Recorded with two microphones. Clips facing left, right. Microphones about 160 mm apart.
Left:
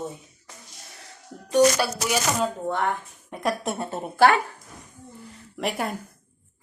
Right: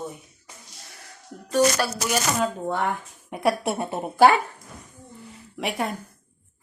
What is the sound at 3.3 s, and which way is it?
A woman's voice, 10° right (ahead or behind).